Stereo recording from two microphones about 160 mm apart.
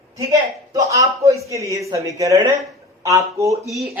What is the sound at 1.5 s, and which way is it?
Speech, 20° right (ahead or behind).